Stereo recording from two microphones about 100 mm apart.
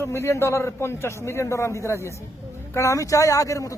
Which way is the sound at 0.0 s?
25° left (ahead or behind).